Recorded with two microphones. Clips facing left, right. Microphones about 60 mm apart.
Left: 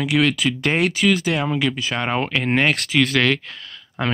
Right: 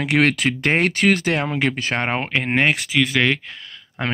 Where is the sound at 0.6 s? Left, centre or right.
Right.